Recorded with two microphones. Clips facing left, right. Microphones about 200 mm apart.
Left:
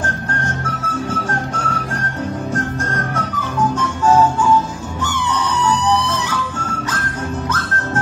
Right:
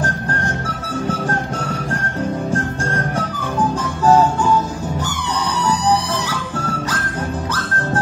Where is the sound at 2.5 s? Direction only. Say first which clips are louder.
Right 1 dB; 30° right (ahead or behind).